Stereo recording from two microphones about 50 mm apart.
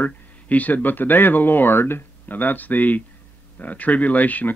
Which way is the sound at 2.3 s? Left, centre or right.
Left.